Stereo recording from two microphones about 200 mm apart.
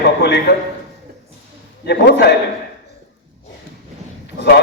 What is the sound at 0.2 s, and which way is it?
Speech, 60° left (ahead or behind).